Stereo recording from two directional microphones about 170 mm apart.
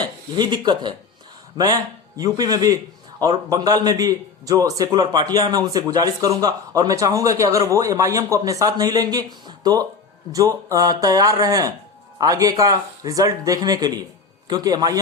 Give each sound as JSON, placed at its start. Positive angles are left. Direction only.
{"t": 0.0, "sound": "a man's voice", "side_deg": -25}